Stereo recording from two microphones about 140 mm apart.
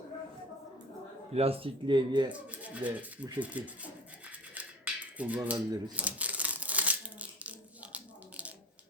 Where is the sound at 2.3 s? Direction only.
10° right (ahead or behind).